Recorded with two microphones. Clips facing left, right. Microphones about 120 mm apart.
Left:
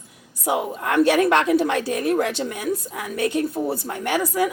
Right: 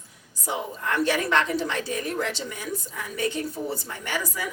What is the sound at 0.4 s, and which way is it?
A woman's voice, 65° left (ahead or behind).